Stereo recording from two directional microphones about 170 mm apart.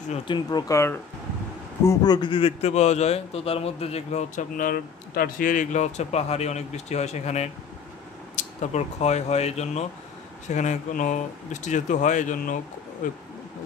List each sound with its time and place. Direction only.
0.1 s a man's voice: 30° left (ahead or behind); by 12.5 s 50° left (ahead or behind)